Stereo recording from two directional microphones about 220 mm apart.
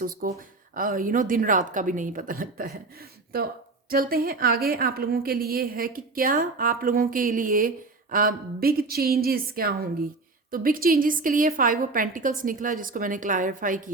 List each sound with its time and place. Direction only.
0.0 s a woman's voice: 40° right (ahead or behind)